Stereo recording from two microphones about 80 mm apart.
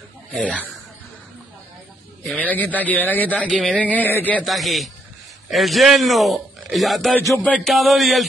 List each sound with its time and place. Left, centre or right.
0.3 s speech: centre
2.2 s a man's voice: centre
3.4 s a man's voice: centre
4.5 s a man's voice: centre